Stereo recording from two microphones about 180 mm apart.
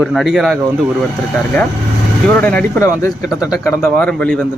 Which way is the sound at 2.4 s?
10° left (ahead or behind).